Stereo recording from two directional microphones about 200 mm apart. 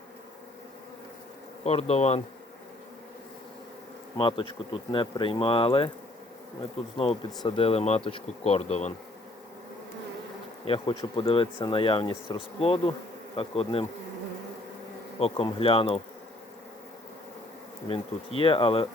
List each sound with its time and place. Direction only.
1.6 s speech: 30° left (ahead or behind)
4.2 s speech: 25° left (ahead or behind)
6.9 s speech: 25° left (ahead or behind)
10.7 s speech: 25° left (ahead or behind)
15.2 s speech: 25° left (ahead or behind)
17.8 s speech: 30° left (ahead or behind)